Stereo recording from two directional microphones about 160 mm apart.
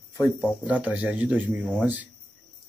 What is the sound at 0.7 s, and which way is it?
Speech, 10° right (ahead or behind).